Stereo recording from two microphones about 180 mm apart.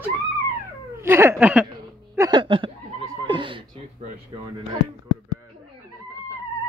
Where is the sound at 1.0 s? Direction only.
15° right (ahead or behind).